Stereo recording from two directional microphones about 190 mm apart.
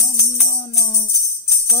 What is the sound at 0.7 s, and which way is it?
Music, 15° left (ahead or behind).